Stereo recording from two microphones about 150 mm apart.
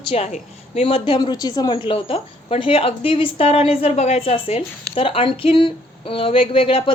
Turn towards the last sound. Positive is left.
turn(degrees=35)  # may be behind; listen again after turning